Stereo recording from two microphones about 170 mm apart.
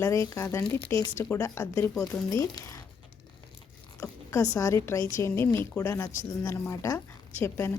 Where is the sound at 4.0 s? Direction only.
20° left (ahead or behind).